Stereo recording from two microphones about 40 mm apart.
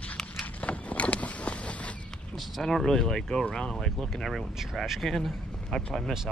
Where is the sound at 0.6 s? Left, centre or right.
Left.